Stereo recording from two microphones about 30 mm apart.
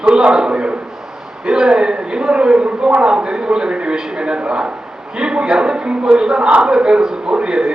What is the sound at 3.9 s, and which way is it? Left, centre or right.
Speech, centre.